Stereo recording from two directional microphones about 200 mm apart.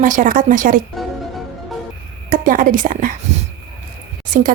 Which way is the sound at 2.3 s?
45° right (ahead or behind).